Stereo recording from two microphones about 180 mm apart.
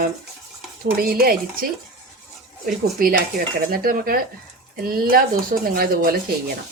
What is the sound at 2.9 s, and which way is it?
Speech, 50° right (ahead or behind).